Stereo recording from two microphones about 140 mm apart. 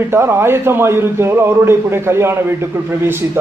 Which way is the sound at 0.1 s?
15° right (ahead or behind).